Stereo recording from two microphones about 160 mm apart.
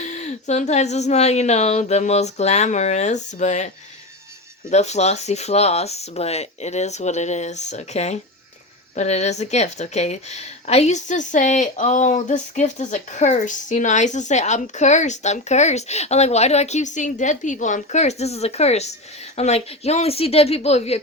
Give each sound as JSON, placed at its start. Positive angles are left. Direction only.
{"t": 0.0, "sound": "a woman's voice", "side_deg": 45}
{"t": 4.7, "sound": "a woman's voice", "side_deg": 45}